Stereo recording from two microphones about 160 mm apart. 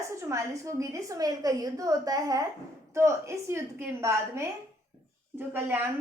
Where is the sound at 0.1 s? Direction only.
20° right (ahead or behind).